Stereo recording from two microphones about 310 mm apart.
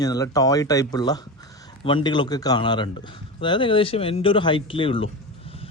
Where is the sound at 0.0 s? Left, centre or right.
Centre.